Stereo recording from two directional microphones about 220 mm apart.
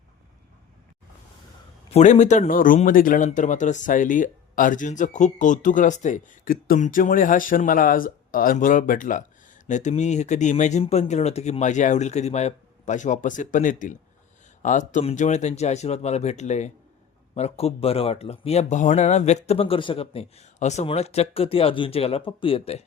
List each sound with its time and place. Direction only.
1.9 s speech: 30° left (ahead or behind)